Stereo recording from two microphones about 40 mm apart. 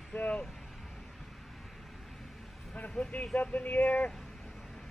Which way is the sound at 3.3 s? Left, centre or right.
Left.